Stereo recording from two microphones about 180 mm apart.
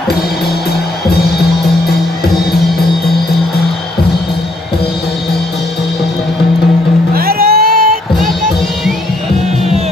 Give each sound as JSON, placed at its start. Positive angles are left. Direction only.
{"t": 7.2, "sound": "music", "side_deg": -55}